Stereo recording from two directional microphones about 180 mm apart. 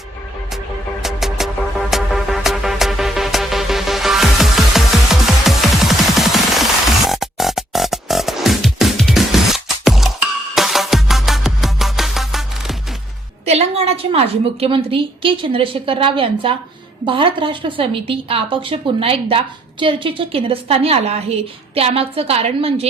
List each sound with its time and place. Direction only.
1.0 s music: centre (ahead or behind)
13.4 s a woman's voice: 35° right (ahead or behind)